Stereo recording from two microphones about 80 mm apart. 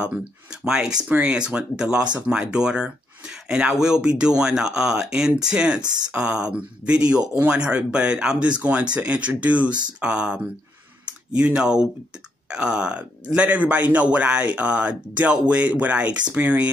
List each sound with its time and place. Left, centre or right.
0.7 s speech: centre